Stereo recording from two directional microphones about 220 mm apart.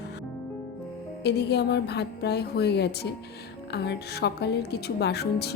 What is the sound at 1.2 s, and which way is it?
A woman's voice, 50° left (ahead or behind).